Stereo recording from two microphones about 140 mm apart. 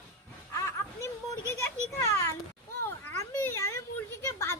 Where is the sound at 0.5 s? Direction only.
20° left (ahead or behind).